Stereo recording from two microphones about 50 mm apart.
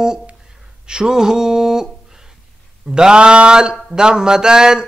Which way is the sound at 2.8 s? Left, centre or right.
Centre.